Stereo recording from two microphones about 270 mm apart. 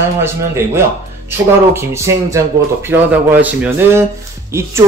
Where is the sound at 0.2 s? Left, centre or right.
Centre.